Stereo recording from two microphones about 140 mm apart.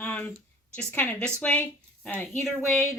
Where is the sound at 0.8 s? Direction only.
10° left (ahead or behind).